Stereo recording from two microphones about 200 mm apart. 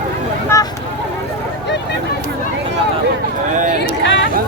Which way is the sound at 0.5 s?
15° left (ahead or behind).